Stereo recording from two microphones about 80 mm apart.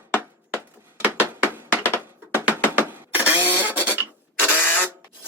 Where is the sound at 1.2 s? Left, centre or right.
Right.